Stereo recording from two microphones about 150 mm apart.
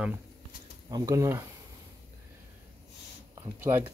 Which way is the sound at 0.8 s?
25° right (ahead or behind).